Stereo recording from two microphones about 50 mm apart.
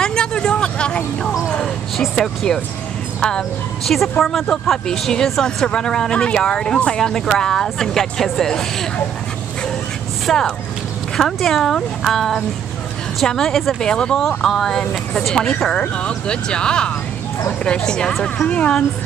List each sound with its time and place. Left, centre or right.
0.0 s vehicle: centre
2.0 s speech: centre
3.8 s a woman's voice: centre
10.3 s speech: centre